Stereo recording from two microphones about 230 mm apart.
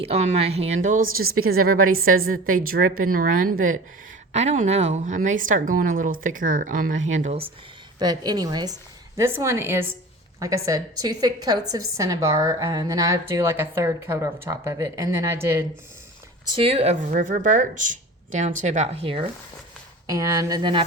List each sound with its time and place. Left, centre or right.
0.0 s speech: right
1.7 s a woman's voice: right
2.2 s speech: right
7.9 s a woman's voice: centre
16.6 s a woman's voice: right